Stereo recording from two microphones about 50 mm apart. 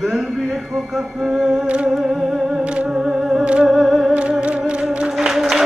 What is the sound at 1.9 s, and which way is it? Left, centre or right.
Music, centre.